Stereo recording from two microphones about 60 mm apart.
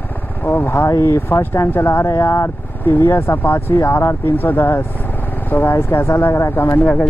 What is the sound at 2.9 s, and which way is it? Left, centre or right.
Speech, left.